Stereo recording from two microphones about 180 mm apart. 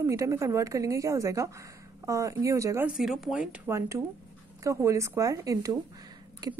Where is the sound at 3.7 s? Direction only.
15° right (ahead or behind).